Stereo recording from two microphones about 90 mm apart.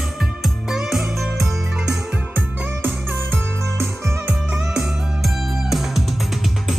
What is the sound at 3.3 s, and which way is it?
Music, 25° right (ahead or behind).